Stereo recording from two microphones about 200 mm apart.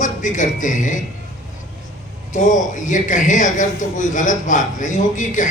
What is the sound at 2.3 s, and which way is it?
A man's voice, 40° left (ahead or behind).